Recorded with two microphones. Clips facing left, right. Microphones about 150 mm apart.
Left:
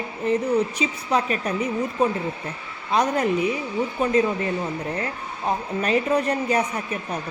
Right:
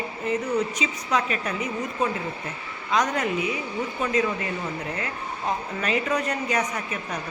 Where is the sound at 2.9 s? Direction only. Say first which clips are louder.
Left 3 dB; 35° left (ahead or behind).